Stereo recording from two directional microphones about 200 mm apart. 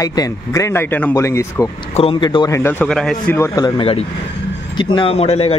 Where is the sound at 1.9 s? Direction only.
25° left (ahead or behind).